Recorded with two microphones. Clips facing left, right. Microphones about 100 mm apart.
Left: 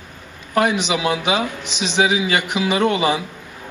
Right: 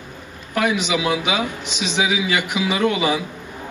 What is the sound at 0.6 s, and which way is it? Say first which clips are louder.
A man's voice: left 2 dB; 30° left (ahead or behind).